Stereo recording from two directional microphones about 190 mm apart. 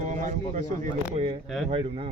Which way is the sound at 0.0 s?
40° right (ahead or behind).